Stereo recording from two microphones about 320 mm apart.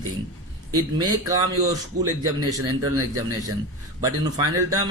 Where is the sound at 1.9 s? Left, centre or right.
Right.